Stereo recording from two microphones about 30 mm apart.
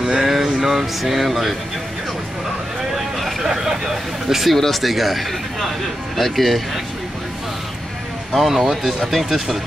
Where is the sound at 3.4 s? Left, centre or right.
Centre.